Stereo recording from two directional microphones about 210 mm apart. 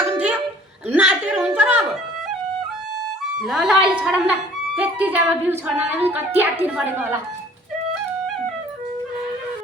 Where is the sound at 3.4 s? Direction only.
Centre (ahead or behind).